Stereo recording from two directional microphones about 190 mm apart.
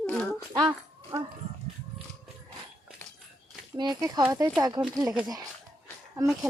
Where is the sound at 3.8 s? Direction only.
20° right (ahead or behind).